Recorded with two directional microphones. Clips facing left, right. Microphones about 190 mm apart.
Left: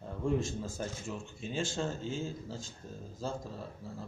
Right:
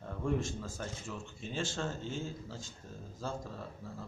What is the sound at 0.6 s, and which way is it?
Speech, 25° left (ahead or behind).